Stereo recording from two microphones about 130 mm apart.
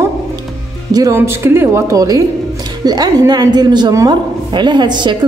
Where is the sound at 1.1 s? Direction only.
20° right (ahead or behind).